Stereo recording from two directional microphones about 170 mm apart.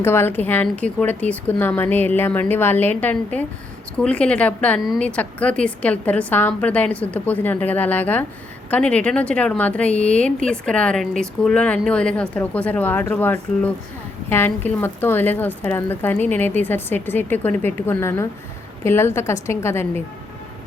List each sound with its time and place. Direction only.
0.0 s a woman's voice: 15° left (ahead or behind)